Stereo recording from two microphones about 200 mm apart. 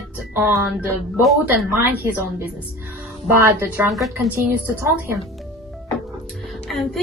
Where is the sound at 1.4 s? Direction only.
10° right (ahead or behind).